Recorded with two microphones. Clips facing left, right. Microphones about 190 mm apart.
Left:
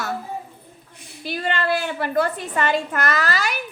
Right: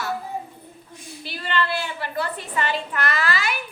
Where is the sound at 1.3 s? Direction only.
45° left (ahead or behind).